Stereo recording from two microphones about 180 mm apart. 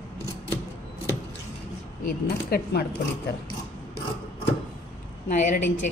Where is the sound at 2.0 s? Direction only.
55° left (ahead or behind).